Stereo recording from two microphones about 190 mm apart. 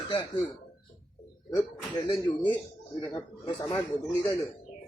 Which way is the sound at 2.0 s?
25° left (ahead or behind).